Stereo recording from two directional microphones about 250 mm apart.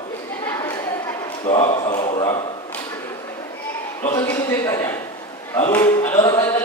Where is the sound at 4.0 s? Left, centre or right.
Centre.